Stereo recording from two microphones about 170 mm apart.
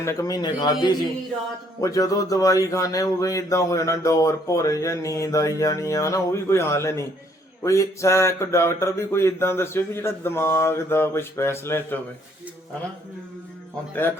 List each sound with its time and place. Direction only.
0.0 s speech: 20° left (ahead or behind)